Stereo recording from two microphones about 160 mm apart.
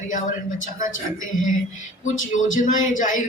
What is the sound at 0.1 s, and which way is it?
Speech, 55° left (ahead or behind).